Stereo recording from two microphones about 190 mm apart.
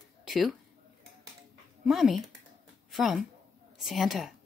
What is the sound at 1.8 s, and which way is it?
Speech, centre (ahead or behind).